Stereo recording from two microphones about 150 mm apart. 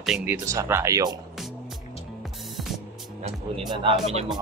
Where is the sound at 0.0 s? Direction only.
10° right (ahead or behind).